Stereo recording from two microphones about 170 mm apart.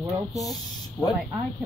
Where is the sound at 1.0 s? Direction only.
15° left (ahead or behind).